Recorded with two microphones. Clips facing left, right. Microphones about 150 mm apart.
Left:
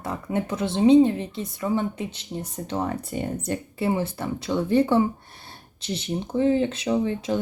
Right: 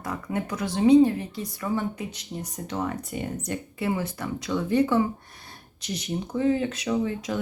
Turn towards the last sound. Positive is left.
turn(degrees=30)  # may be behind; listen again after turning